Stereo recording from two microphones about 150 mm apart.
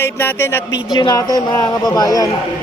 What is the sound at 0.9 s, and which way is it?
A man's voice, 30° left (ahead or behind).